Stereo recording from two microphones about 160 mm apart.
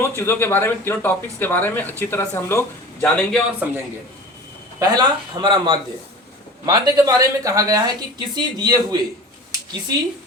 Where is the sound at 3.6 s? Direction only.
10° right (ahead or behind).